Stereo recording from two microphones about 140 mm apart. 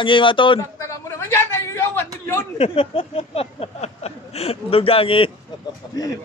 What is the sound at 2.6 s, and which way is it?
Speech, 40° left (ahead or behind).